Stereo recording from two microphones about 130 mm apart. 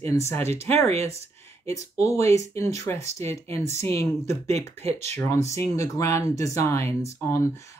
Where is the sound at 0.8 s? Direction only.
55° right (ahead or behind).